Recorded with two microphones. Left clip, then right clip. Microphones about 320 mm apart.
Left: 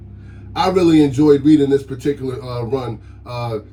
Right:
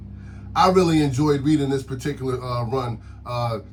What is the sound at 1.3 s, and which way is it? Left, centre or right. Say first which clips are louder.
Speech: left 10 dB; right.